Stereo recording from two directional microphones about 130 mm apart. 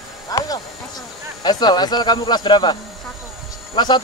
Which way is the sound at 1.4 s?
35° left (ahead or behind).